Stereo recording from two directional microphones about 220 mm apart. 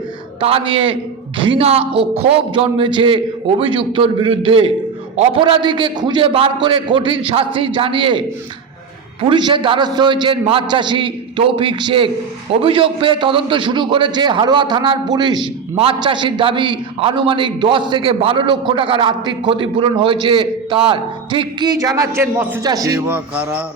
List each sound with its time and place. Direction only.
0.3 s a man's voice: 25° right (ahead or behind)
9.2 s a man's voice: 20° right (ahead or behind)